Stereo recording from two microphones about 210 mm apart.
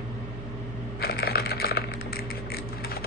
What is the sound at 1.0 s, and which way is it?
Typing, 50° left (ahead or behind).